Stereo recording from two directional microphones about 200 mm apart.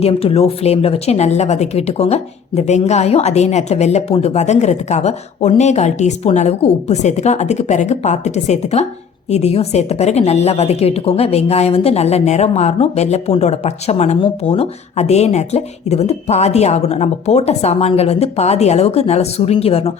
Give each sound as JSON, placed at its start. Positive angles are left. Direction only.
{"t": 0.0, "sound": "a woman's voice", "side_deg": 30}